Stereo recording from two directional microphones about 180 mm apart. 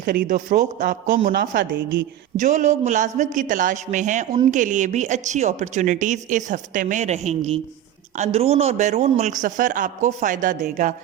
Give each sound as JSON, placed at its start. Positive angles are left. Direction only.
{"t": 0.3, "sound": "a woman's voice", "side_deg": -45}
{"t": 1.4, "sound": "a woman's voice", "side_deg": -65}
{"t": 2.4, "sound": "a woman's voice", "side_deg": -45}